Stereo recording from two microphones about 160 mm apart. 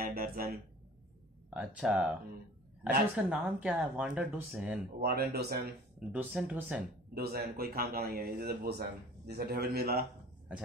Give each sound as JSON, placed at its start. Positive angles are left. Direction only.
{"t": 0.0, "sound": "speech", "side_deg": -65}
{"t": 1.5, "sound": "speech", "side_deg": -10}
{"t": 3.2, "sound": "speech", "side_deg": -10}
{"t": 5.0, "sound": "speech", "side_deg": -80}
{"t": 5.9, "sound": "speech", "side_deg": -10}
{"t": 7.2, "sound": "speech", "side_deg": -75}